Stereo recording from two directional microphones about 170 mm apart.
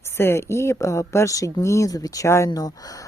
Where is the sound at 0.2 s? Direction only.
15° left (ahead or behind).